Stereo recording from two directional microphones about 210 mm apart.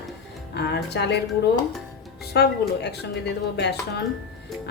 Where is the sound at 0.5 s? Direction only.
55° left (ahead or behind).